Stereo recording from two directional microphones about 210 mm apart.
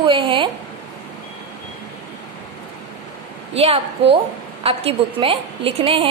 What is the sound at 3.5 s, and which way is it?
A woman's voice, 30° right (ahead or behind).